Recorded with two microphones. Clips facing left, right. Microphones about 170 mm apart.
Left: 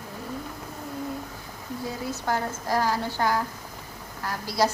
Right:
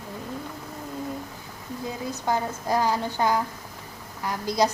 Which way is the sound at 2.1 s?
15° right (ahead or behind).